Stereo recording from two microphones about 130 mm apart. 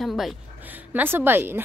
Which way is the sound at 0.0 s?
Centre (ahead or behind).